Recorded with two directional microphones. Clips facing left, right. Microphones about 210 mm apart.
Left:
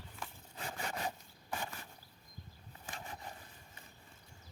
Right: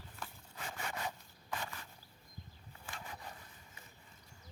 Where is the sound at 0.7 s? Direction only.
35° left (ahead or behind).